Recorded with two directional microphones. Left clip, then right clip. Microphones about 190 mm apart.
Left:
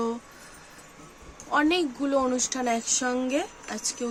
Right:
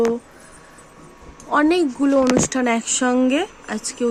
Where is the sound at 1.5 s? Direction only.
35° right (ahead or behind).